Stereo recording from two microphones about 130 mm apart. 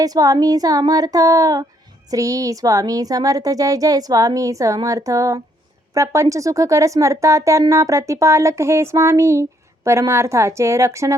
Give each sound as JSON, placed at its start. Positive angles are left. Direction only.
{"t": 0.0, "sound": "speech", "side_deg": -30}